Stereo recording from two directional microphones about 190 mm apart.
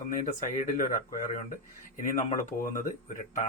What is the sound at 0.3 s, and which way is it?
Speech, 45° left (ahead or behind).